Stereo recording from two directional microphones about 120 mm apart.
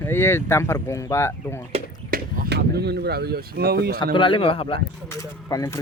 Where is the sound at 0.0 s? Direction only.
20° left (ahead or behind).